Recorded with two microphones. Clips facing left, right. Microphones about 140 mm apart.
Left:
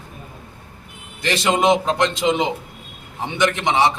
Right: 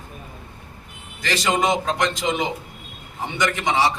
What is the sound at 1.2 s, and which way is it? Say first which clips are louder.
A man's voice: left 3 dB; 20° left (ahead or behind).